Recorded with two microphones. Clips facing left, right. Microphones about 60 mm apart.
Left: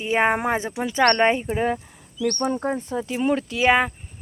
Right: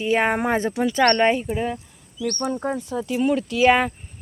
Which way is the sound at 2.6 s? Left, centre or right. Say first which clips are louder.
Even; left.